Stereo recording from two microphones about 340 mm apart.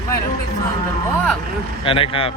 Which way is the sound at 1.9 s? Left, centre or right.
Centre.